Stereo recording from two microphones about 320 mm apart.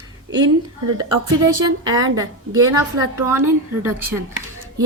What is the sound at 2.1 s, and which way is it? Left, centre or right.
A woman's voice, centre.